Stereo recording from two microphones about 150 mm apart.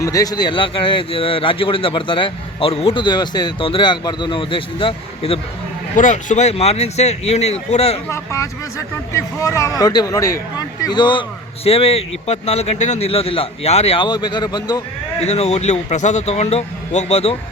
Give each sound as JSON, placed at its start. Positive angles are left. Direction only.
{"t": 0.0, "sound": "speech", "side_deg": 25}
{"t": 6.0, "sound": "a man's voice", "side_deg": 60}
{"t": 8.1, "sound": "speech", "side_deg": 20}
{"t": 15.2, "sound": "a man's voice", "side_deg": 45}